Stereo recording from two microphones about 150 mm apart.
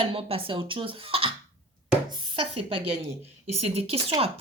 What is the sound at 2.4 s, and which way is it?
Speech, 35° right (ahead or behind).